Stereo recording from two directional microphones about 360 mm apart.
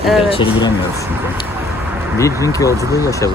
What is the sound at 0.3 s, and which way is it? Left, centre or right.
Speech, centre.